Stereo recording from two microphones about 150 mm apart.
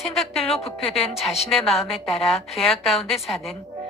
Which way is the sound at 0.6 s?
40° left (ahead or behind).